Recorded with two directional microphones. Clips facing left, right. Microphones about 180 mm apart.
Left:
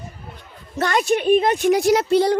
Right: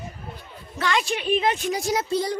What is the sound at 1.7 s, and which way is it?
Speech, 70° left (ahead or behind).